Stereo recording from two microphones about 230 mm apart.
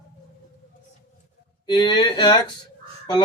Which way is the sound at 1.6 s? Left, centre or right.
Centre.